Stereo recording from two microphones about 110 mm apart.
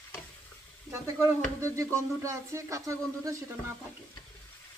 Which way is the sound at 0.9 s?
25° right (ahead or behind).